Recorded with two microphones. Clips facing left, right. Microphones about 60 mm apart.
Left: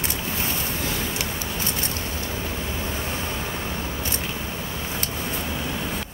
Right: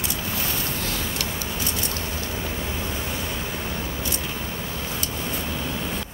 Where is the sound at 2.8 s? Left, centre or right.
Left.